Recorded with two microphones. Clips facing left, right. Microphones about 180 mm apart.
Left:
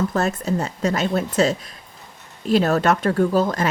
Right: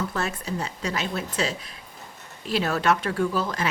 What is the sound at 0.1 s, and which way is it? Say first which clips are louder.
A woman's voice: left 7 dB; 40° left (ahead or behind).